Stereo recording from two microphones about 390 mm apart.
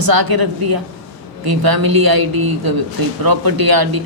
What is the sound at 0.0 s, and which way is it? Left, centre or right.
Speech, right.